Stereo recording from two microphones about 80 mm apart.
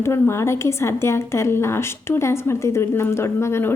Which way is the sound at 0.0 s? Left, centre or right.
Left.